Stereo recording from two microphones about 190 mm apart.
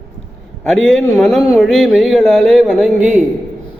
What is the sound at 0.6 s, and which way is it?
A man's voice, centre (ahead or behind).